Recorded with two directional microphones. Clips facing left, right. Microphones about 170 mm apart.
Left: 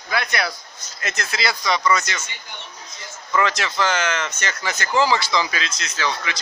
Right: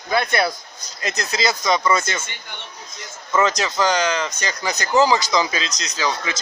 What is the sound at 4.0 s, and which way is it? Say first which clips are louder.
Speech: right 3 dB; 35° right (ahead or behind).